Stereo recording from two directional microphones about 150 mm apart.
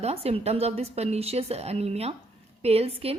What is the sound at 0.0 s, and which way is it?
A woman's voice, 45° right (ahead or behind).